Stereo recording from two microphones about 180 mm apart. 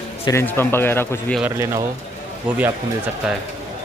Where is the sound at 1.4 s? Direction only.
15° right (ahead or behind).